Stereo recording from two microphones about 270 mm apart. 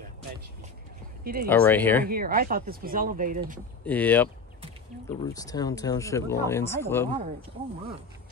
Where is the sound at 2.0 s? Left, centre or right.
Right.